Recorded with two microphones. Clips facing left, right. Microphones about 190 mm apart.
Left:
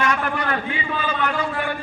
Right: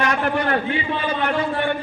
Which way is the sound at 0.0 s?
35° right (ahead or behind).